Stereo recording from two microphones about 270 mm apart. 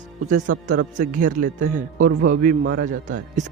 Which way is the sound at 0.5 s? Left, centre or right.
Right.